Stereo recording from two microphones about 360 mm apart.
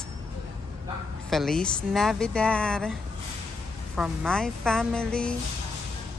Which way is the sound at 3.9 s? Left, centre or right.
Centre.